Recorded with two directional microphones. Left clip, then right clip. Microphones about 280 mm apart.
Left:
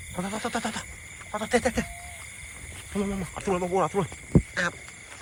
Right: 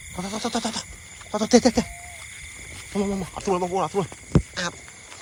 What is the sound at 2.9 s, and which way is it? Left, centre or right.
Speech, centre.